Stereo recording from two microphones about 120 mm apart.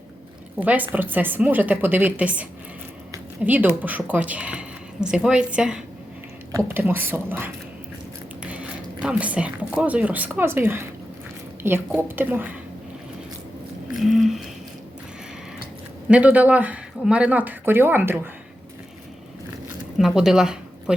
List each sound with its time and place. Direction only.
0.6 s a woman's voice: 15° right (ahead or behind)
6.5 s a woman's voice: 20° right (ahead or behind)
13.9 s a sound: centre (ahead or behind)
16.0 s a woman's voice: 10° right (ahead or behind)
19.6 s zipper: 5° right (ahead or behind)